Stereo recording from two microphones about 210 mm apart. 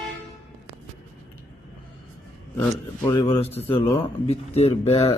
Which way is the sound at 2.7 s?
20° left (ahead or behind).